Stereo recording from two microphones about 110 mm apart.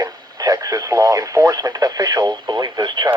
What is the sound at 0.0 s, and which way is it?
Speech, 30° right (ahead or behind).